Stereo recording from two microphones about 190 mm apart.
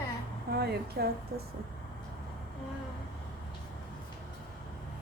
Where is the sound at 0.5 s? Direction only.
55° right (ahead or behind).